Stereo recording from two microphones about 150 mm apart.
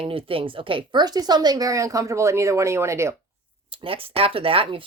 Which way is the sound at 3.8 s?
40° right (ahead or behind).